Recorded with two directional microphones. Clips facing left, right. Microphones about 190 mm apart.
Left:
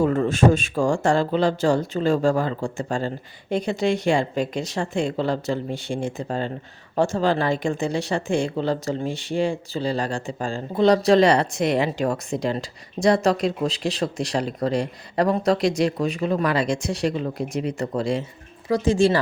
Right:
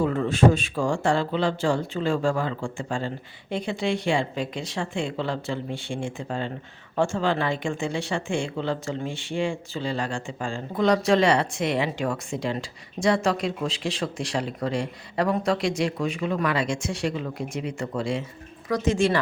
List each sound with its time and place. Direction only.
0.0 s speech: 45° left (ahead or behind)